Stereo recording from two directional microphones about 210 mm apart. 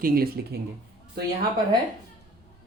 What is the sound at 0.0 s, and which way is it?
Speech, 45° right (ahead or behind).